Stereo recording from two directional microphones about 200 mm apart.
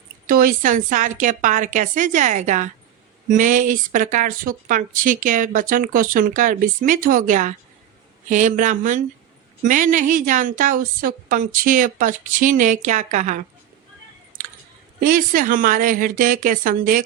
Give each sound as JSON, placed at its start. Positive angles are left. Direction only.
{"t": 0.3, "sound": "speech", "side_deg": -45}
{"t": 15.0, "sound": "a woman's voice", "side_deg": -45}